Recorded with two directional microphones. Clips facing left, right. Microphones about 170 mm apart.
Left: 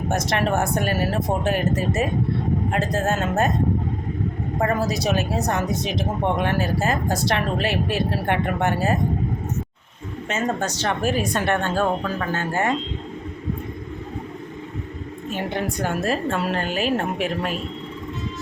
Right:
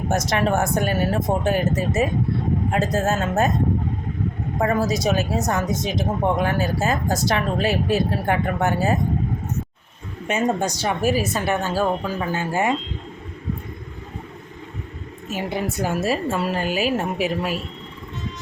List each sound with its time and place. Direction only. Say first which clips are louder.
0.3 s speech: right 1 dB; centre (ahead or behind)
5.0 s speech: right 1 dB; centre (ahead or behind)
10.2 s speech: right 3 dB; 15° right (ahead or behind)
15.3 s speech: right 1 dB; 5° right (ahead or behind)